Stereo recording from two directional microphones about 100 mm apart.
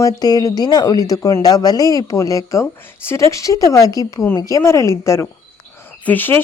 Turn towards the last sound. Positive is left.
turn(degrees=20)  # may be behind; listen again after turning